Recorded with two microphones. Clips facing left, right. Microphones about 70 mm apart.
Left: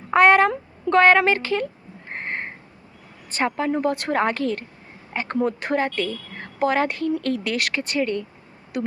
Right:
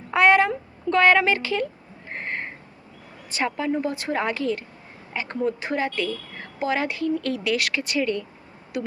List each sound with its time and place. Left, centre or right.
0.1 s speech: left
2.0 s frog: left
3.3 s speech: left
8.7 s a sound: left